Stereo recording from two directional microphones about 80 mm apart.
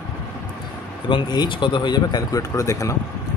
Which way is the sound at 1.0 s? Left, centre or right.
Left.